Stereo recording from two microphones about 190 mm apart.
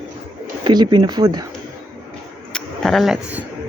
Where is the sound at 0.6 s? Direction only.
25° right (ahead or behind).